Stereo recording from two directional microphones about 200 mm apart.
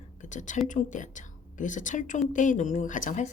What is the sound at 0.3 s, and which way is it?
Speech, 40° left (ahead or behind).